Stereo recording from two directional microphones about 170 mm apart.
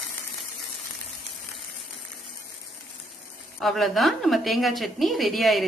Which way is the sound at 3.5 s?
Centre (ahead or behind).